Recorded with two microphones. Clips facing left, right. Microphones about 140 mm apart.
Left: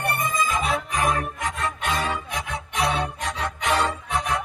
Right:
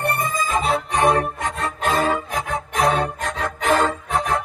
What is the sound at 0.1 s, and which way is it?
Music, 35° right (ahead or behind).